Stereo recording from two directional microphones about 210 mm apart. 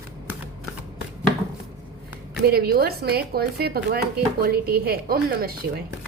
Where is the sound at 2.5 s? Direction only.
45° right (ahead or behind).